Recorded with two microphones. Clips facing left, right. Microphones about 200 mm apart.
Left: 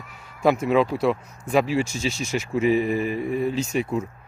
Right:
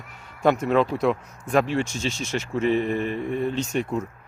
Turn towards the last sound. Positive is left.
turn(degrees=5)  # may be behind; listen again after turning